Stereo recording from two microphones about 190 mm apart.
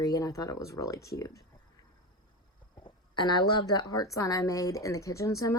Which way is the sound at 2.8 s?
25° left (ahead or behind).